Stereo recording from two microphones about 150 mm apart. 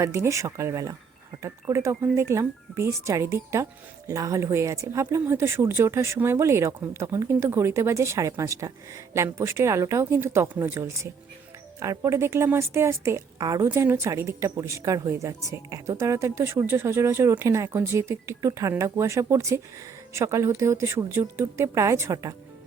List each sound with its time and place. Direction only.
0.0 s a woman's voice: 20° right (ahead or behind)